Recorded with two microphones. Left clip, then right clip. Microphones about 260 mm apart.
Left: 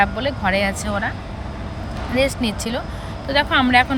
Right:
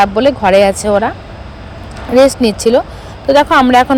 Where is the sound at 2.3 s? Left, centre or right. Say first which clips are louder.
Right 14 dB; centre.